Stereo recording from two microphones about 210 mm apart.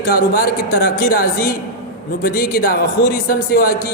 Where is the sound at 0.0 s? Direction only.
45° left (ahead or behind).